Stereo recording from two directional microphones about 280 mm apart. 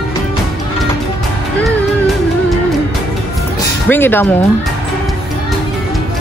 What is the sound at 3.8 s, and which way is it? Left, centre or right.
Speech, centre.